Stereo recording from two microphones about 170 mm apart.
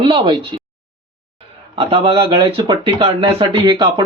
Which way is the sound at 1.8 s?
35° right (ahead or behind).